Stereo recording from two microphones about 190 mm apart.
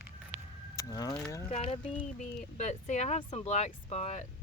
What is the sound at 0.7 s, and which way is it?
Keys jangling, 20° left (ahead or behind).